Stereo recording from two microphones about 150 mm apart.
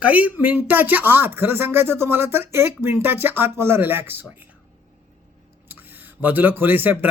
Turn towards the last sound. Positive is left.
turn(degrees=-10)  # may be behind; listen again after turning